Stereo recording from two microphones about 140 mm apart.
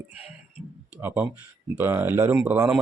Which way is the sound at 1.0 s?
15° right (ahead or behind).